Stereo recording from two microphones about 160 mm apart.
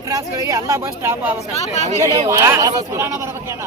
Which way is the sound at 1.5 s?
40° left (ahead or behind).